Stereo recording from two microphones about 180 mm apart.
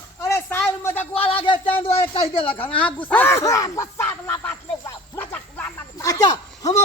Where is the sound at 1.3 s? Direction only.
30° left (ahead or behind).